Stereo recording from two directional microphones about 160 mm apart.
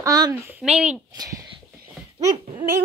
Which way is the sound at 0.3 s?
5° right (ahead or behind).